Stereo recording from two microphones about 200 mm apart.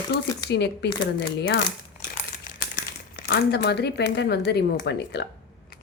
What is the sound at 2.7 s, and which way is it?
Speech, 45° left (ahead or behind).